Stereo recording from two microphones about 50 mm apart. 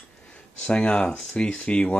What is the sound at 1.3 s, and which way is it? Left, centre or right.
Speech, left.